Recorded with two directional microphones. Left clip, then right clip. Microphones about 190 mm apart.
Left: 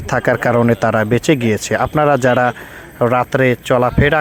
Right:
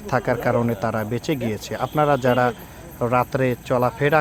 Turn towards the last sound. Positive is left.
turn(degrees=30)  # may be behind; listen again after turning